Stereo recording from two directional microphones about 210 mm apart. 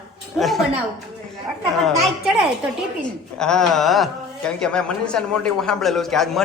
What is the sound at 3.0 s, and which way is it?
Speech, 5° left (ahead or behind).